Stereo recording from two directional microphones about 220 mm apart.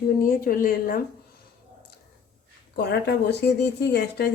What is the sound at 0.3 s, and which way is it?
Speech, 40° left (ahead or behind).